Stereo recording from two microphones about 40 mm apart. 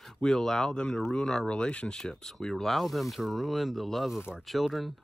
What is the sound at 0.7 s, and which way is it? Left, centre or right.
Speech, left.